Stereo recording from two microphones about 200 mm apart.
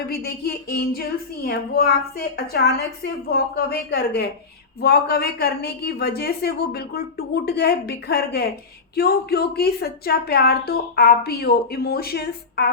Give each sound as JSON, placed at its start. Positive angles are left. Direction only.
{"t": 0.1, "sound": "speech", "side_deg": 50}